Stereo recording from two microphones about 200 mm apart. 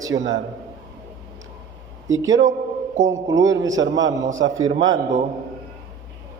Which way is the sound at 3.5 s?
15° right (ahead or behind).